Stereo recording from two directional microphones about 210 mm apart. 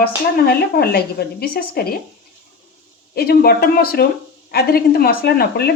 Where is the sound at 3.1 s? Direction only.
50° left (ahead or behind).